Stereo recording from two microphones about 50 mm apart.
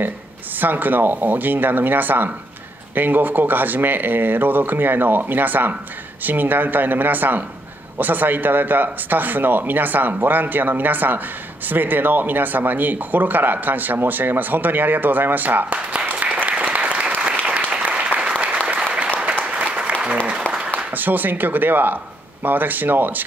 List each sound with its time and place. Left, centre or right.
0.6 s speech: right
15.7 s applause: right
20.9 s speech: right